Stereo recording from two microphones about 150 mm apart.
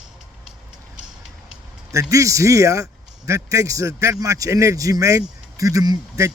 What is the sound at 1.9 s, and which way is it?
A man's voice, 20° right (ahead or behind).